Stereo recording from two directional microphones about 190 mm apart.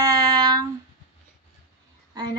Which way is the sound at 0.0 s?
20° right (ahead or behind).